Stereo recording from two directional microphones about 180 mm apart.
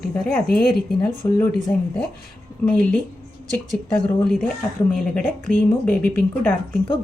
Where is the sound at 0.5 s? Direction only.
55° left (ahead or behind).